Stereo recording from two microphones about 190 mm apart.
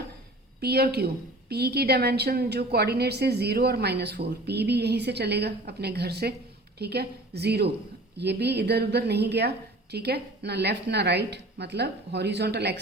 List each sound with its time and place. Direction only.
0.6 s a woman's voice: 55° right (ahead or behind)